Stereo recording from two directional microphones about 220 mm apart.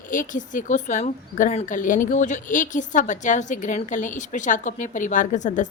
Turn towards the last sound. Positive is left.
turn(degrees=35)  # may be behind; listen again after turning